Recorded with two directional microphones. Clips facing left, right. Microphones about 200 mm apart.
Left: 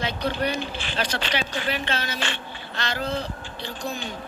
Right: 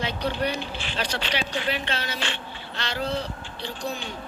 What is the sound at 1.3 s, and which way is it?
Speech, 45° left (ahead or behind).